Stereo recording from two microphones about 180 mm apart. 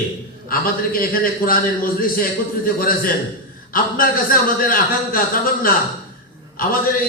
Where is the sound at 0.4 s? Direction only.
55° left (ahead or behind).